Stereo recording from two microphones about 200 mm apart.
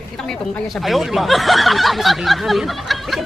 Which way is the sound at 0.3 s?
Centre (ahead or behind).